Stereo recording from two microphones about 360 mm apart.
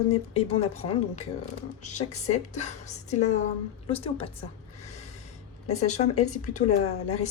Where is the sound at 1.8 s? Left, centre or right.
Centre.